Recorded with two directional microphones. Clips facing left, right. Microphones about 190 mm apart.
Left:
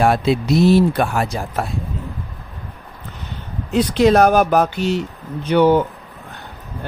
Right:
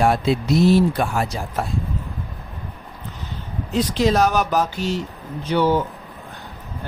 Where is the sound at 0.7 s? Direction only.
65° left (ahead or behind).